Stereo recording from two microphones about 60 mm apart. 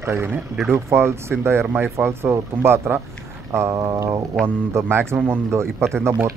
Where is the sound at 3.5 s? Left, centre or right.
Right.